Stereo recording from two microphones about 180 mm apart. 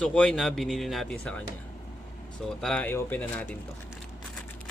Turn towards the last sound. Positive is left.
turn(degrees=10)  # may be behind; listen again after turning